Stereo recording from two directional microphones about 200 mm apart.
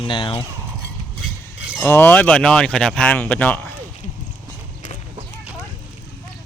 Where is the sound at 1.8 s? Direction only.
10° left (ahead or behind).